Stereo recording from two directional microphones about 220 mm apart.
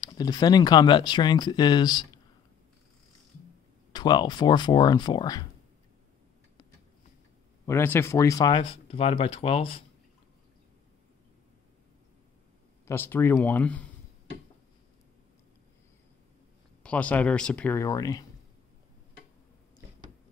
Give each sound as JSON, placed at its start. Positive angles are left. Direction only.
{"t": 0.0, "sound": "speech", "side_deg": 15}
{"t": 3.9, "sound": "speech", "side_deg": 20}
{"t": 7.6, "sound": "speech", "side_deg": 10}
{"t": 12.8, "sound": "speech", "side_deg": 10}
{"t": 16.8, "sound": "speech", "side_deg": 5}